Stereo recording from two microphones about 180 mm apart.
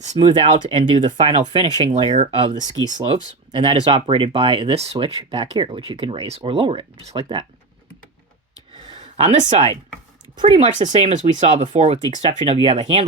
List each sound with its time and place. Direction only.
0.0 s speech: 35° right (ahead or behind)
8.7 s a sound: 30° right (ahead or behind)
10.3 s speech: 30° right (ahead or behind)
10.8 s speech: 40° right (ahead or behind)